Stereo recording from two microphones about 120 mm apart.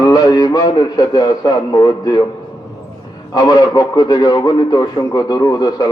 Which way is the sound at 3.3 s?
30° left (ahead or behind).